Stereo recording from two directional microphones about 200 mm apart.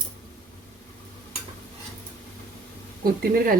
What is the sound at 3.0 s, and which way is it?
Speech, 50° right (ahead or behind).